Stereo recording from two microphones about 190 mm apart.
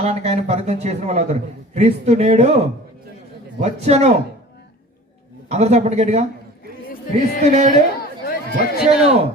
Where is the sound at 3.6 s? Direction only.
35° right (ahead or behind).